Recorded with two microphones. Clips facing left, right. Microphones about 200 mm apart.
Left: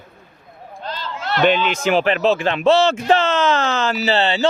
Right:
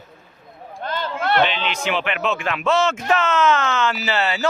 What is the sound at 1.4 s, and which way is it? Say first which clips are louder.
Speech: left 8 dB; 50° left (ahead or behind).